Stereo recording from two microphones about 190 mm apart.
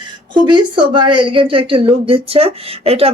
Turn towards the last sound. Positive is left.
turn(degrees=-30)  # may be behind; listen again after turning